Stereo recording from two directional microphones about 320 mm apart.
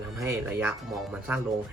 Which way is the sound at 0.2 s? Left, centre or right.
Centre.